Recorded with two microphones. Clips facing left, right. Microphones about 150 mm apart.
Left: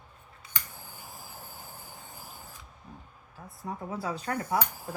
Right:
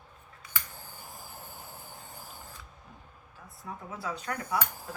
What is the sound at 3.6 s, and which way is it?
Speech, 35° left (ahead or behind).